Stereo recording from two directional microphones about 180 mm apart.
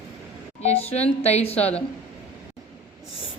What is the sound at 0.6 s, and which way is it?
A woman's voice, 35° left (ahead or behind).